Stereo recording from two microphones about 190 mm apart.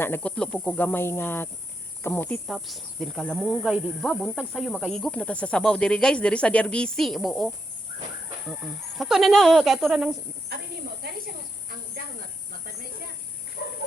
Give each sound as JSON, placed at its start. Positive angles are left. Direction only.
{"t": 0.0, "sound": "speech", "side_deg": 10}
{"t": 10.5, "sound": "cricket", "side_deg": -55}